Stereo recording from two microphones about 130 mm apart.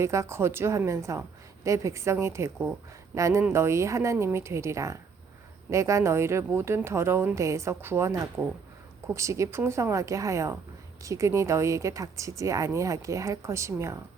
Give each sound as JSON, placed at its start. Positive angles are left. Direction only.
{"t": 0.0, "sound": "a woman's voice", "side_deg": -20}